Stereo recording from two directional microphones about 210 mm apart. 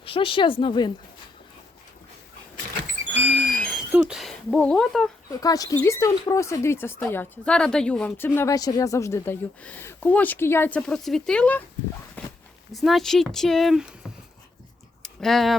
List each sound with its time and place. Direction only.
0.0 s a woman's voice: 25° left (ahead or behind)
3.2 s a sound: 5° left (ahead or behind)
5.4 s speech: 15° left (ahead or behind)
12.2 s a sound: 5° left (ahead or behind)
12.7 s speech: centre (ahead or behind)
15.0 s speech: centre (ahead or behind)